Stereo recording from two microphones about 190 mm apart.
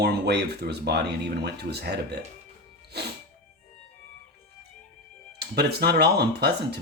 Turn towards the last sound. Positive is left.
turn(degrees=-60)  # may be behind; listen again after turning